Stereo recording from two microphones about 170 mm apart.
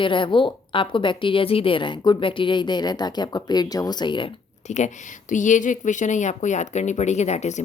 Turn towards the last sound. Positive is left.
turn(degrees=45)  # may be behind; listen again after turning